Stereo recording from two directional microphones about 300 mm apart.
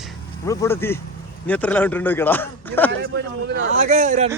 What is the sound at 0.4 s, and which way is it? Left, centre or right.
Speech, centre.